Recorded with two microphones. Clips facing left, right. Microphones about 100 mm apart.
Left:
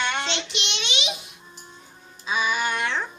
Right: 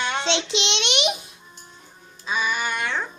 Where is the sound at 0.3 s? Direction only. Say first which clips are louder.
Right 6 dB; 90° right; by 1.1 s 65° right (ahead or behind).